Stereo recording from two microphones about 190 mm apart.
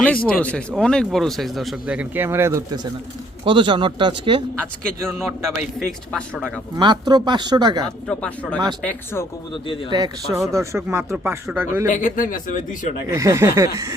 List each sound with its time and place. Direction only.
0.0 s speech: 5° left (ahead or behind); by 4.4 s 25° right (ahead or behind)
6.1 s speech: 5° left (ahead or behind)
6.7 s speech: 25° right (ahead or behind)
8.0 s speech: 5° left (ahead or behind)
9.9 s speech: 20° right (ahead or behind)
11.9 s speech: 40° left (ahead or behind)
13.1 s speech: 15° right (ahead or behind)